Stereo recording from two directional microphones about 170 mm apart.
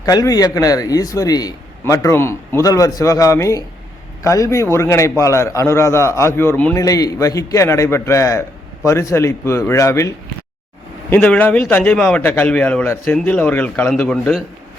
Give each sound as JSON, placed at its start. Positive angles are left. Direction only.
{"t": 0.0, "sound": "a man's voice", "side_deg": 20}
{"t": 6.7, "sound": "a man's voice", "side_deg": 20}